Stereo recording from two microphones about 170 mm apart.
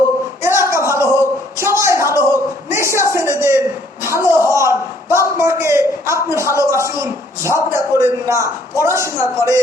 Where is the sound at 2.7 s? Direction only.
15° right (ahead or behind).